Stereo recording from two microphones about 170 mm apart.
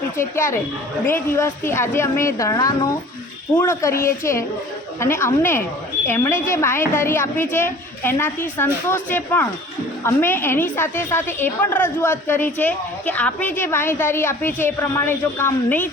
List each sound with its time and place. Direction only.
0.2 s a woman's voice: 15° left (ahead or behind)